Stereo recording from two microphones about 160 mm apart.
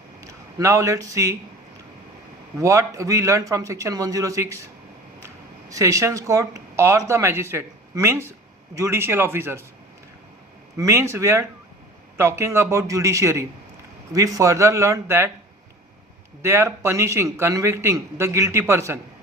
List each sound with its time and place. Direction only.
0.2 s a man's voice: 20° right (ahead or behind)
2.6 s a man's voice: 20° right (ahead or behind)
10.8 s a man's voice: 15° right (ahead or behind)
16.4 s a man's voice: 15° right (ahead or behind)